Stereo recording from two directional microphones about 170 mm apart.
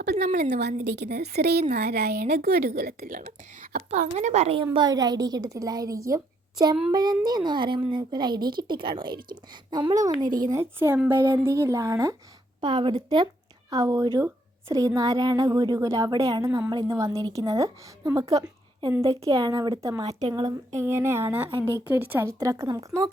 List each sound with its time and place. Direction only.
0.0 s a woman's voice: 75° right (ahead or behind); by 20.1 s 20° right (ahead or behind)
20.1 s speech: 40° right (ahead or behind)
20.3 s a woman's voice: 25° right (ahead or behind)
20.8 s speech: 15° right (ahead or behind)